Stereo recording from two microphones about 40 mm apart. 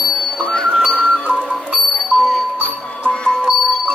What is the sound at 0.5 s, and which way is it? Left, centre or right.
Music, left.